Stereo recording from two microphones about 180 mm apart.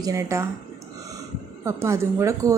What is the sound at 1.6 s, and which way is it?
Speech, 15° right (ahead or behind).